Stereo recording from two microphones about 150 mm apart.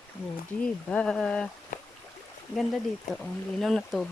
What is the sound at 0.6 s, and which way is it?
Speech, 5° left (ahead or behind).